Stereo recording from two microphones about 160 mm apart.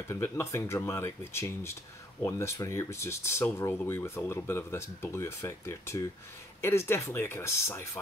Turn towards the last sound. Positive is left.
turn(degrees=15)  # may be behind; listen again after turning